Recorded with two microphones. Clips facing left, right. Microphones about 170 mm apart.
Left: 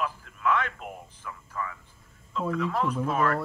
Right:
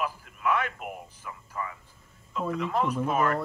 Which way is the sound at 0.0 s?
10° right (ahead or behind).